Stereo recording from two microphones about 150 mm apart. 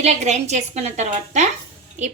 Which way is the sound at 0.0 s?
45° right (ahead or behind).